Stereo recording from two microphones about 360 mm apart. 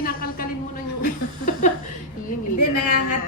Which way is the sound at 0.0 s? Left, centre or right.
Left.